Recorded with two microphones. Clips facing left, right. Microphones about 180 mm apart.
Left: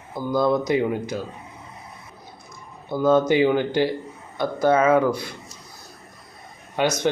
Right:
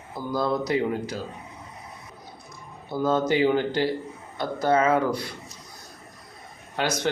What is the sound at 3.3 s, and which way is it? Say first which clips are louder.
Speech: left 3 dB; 15° left (ahead or behind).